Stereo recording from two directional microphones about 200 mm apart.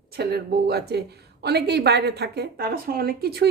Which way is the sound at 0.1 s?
55° right (ahead or behind).